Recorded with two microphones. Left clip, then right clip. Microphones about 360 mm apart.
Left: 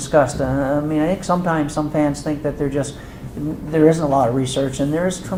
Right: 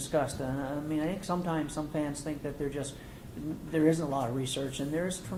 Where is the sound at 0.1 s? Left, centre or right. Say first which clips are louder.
Left 15 dB; centre.